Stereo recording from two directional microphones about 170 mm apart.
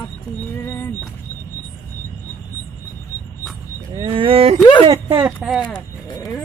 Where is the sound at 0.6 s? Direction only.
15° left (ahead or behind).